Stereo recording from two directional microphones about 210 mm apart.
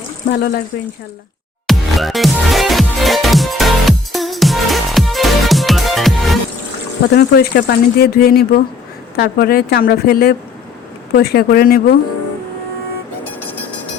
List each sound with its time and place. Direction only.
0.3 s speech: 50° left (ahead or behind)
1.6 s music: centre (ahead or behind)
7.1 s speech: 50° left (ahead or behind)